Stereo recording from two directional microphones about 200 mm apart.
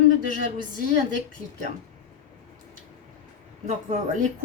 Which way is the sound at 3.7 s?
40° right (ahead or behind).